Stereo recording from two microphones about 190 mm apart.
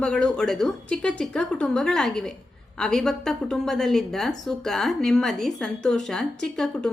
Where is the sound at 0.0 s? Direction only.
5° left (ahead or behind).